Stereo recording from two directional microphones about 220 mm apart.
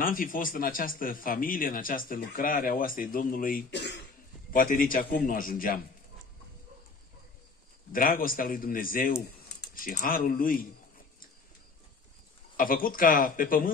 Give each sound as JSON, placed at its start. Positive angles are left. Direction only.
{"t": 0.0, "sound": "speech", "side_deg": 40}
{"t": 4.5, "sound": "speech", "side_deg": 40}
{"t": 7.9, "sound": "speech", "side_deg": 40}
{"t": 12.5, "sound": "speech", "side_deg": 40}